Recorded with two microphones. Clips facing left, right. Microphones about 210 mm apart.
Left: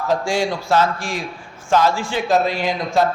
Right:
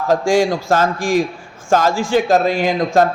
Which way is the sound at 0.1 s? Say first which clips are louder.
Right 6 dB; 45° right (ahead or behind).